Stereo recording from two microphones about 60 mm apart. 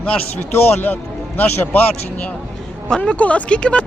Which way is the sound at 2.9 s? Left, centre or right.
Centre.